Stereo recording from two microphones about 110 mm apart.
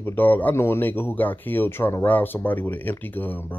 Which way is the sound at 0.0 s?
15° left (ahead or behind).